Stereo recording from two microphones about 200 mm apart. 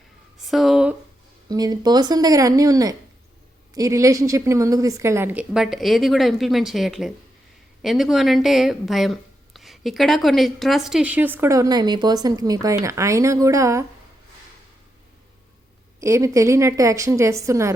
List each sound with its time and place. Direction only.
0.3 s a sound: centre (ahead or behind)
1.5 s speech: 20° right (ahead or behind)
16.0 s speech: 15° right (ahead or behind)